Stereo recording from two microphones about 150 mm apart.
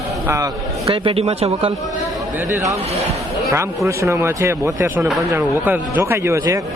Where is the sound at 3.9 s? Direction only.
15° right (ahead or behind).